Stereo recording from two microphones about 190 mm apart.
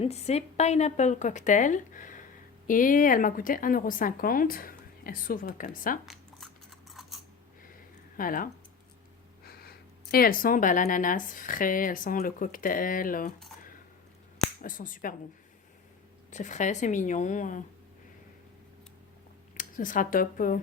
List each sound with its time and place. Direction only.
0.0 s a woman's voice: 35° left (ahead or behind)
6.1 s biting: centre (ahead or behind)
8.1 s speech: 45° left (ahead or behind)
14.6 s speech: 45° left (ahead or behind)
16.3 s a woman's voice: 40° left (ahead or behind)
19.5 s speech: 45° left (ahead or behind)